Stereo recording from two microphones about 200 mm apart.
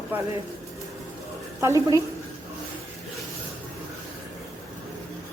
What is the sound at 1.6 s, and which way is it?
Speech, 15° right (ahead or behind).